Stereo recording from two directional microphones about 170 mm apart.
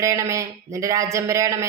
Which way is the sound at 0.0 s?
20° right (ahead or behind).